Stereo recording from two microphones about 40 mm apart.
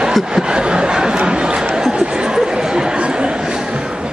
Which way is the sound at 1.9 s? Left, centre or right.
Right.